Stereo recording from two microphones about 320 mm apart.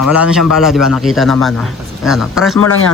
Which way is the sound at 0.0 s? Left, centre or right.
Centre.